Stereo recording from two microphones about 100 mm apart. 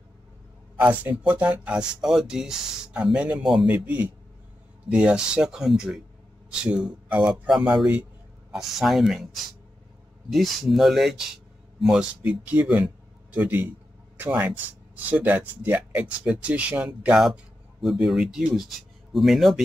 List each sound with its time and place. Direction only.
0.7 s speech: 15° right (ahead or behind)
12.2 s speech: 15° right (ahead or behind)
17.8 s speech: centre (ahead or behind)